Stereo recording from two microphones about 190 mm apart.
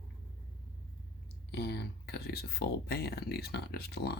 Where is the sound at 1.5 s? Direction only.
60° left (ahead or behind).